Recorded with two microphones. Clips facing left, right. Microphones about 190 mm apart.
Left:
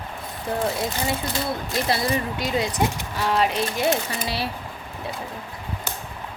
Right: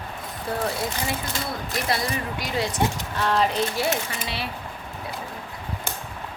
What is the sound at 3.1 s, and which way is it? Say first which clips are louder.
Speech: even; 10° left (ahead or behind).